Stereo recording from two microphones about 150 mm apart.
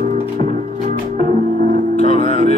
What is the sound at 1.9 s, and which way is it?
Music, 45° left (ahead or behind).